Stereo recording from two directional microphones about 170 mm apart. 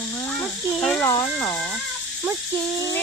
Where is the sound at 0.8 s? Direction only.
5° left (ahead or behind).